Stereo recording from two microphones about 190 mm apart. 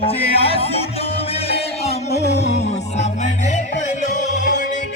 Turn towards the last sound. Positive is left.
turn(degrees=40)  # may be behind; listen again after turning